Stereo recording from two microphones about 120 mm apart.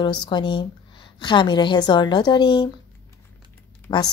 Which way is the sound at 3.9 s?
35° left (ahead or behind).